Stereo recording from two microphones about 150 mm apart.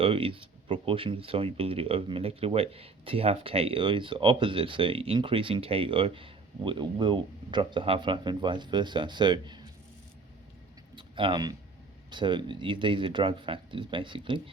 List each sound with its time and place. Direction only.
0.0 s speech: 35° right (ahead or behind)
10.9 s speech: 35° right (ahead or behind)